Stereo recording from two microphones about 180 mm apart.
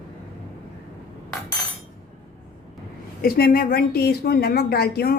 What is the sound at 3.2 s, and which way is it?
A woman's voice, 55° left (ahead or behind).